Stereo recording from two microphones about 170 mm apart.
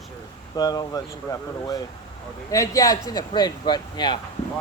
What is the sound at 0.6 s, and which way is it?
Speech, 20° left (ahead or behind).